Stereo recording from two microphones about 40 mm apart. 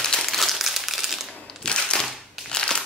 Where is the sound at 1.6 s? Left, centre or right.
Left.